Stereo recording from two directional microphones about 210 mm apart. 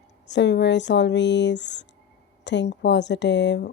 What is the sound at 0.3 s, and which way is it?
Speech, 55° left (ahead or behind).